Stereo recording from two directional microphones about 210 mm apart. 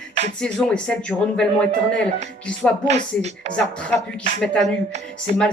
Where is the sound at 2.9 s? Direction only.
30° right (ahead or behind).